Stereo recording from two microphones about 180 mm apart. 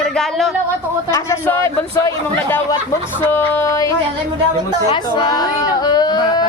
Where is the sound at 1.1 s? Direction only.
15° left (ahead or behind).